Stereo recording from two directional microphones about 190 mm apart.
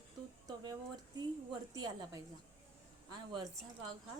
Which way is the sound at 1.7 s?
20° right (ahead or behind).